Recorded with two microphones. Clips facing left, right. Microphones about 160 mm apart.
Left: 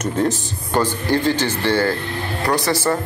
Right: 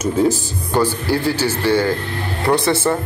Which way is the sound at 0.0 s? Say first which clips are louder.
Right 3 dB; 5° right (ahead or behind).